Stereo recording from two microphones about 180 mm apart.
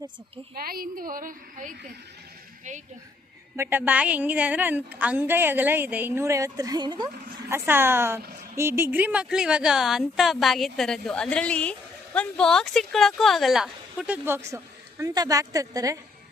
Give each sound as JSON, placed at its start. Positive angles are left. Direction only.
{"t": 0.5, "sound": "a woman's voice", "side_deg": -55}
{"t": 3.5, "sound": "a woman's voice", "side_deg": -10}
{"t": 7.5, "sound": "a woman's voice", "side_deg": -15}